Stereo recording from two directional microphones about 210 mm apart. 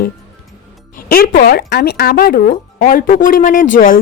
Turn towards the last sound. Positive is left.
turn(degrees=40)  # may be behind; listen again after turning